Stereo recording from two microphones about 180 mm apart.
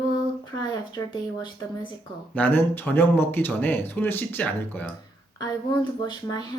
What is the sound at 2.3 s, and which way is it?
Speech, 10° left (ahead or behind).